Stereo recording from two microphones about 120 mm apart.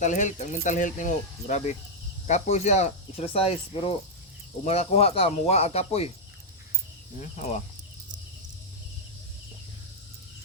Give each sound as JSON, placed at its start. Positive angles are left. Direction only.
{"t": 0.0, "sound": "speech", "side_deg": 85}
{"t": 2.2, "sound": "speech", "side_deg": 70}
{"t": 7.2, "sound": "speech", "side_deg": 75}